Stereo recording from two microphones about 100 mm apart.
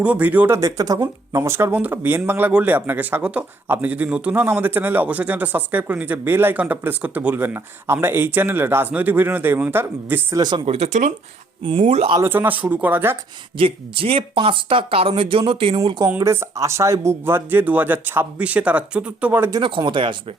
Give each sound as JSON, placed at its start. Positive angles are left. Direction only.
{"t": 0.0, "sound": "speech", "side_deg": -15}
{"t": 0.5, "sound": "speech", "side_deg": -35}
{"t": 10.3, "sound": "speech", "side_deg": -45}
{"t": 11.6, "sound": "speech", "side_deg": -60}
{"t": 12.2, "sound": "speech", "side_deg": -20}
{"t": 13.6, "sound": "speech", "side_deg": -65}
{"t": 16.0, "sound": "speech", "side_deg": -25}
{"t": 19.6, "sound": "speech", "side_deg": -55}